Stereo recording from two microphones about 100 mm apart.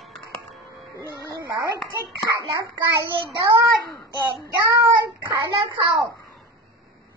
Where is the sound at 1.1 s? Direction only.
40° right (ahead or behind).